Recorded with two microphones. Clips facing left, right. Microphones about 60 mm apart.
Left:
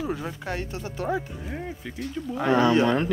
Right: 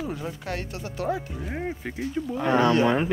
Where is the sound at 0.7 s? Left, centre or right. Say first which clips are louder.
Right 1 dB; left.